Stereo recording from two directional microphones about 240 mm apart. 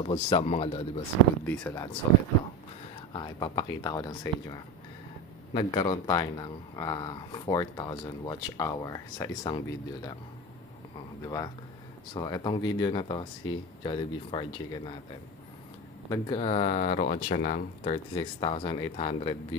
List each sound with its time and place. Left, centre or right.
0.0 s speech: left
1.4 s speech: centre
3.1 s speech: centre
11.2 s speech: centre
16.1 s speech: left
18.1 s speech: left